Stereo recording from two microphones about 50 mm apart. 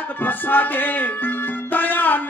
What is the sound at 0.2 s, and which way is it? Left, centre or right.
Music, left.